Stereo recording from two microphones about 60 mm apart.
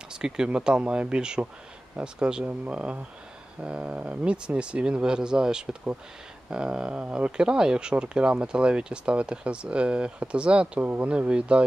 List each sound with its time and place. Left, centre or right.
0.1 s speech: centre